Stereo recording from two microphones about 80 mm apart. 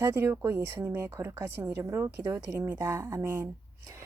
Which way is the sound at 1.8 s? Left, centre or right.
Right.